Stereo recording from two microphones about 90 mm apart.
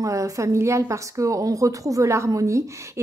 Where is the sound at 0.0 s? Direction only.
40° right (ahead or behind).